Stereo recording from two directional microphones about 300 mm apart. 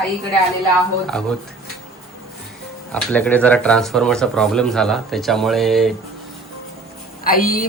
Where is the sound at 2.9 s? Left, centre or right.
Centre.